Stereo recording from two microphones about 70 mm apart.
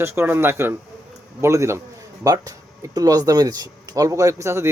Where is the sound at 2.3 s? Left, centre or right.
Right.